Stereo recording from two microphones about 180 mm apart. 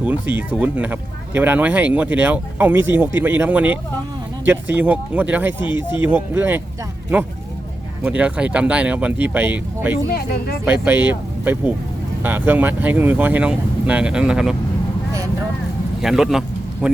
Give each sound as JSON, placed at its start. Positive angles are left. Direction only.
{"t": 0.0, "sound": "speech", "side_deg": -10}
{"t": 8.0, "sound": "speech", "side_deg": -5}
{"t": 10.1, "sound": "speech", "side_deg": 55}
{"t": 10.7, "sound": "speech", "side_deg": -10}
{"t": 16.0, "sound": "speech", "side_deg": -5}